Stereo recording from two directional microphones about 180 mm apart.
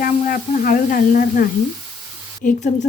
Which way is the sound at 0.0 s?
50° left (ahead or behind).